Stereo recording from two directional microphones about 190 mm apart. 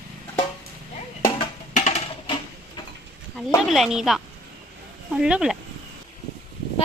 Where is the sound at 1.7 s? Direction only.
40° left (ahead or behind).